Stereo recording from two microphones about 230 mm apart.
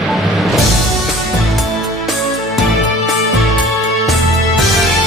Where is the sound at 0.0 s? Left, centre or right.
Centre.